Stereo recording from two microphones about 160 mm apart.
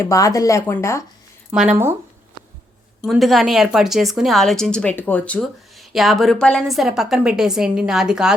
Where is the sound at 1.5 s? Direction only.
5° right (ahead or behind).